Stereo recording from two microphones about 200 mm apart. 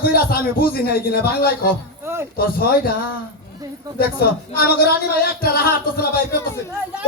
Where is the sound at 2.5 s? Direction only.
50° left (ahead or behind).